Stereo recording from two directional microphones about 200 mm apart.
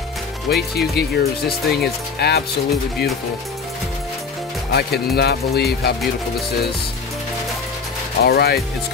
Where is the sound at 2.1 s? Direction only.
55° left (ahead or behind).